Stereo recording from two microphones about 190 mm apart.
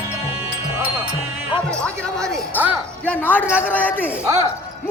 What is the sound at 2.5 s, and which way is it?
Music, 10° right (ahead or behind).